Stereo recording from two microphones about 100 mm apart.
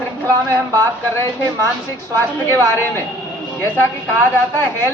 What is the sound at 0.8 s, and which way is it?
Speech, 25° left (ahead or behind).